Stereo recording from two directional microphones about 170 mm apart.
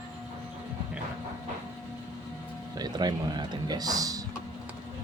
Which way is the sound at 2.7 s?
25° right (ahead or behind).